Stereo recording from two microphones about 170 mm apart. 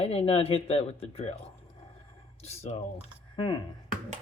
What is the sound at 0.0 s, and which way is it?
Speech, 35° left (ahead or behind).